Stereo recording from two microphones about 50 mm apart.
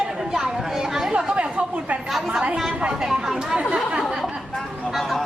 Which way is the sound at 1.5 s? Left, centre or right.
Right.